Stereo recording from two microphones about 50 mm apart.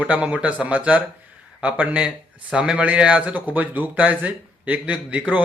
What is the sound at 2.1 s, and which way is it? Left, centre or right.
A man's voice, centre.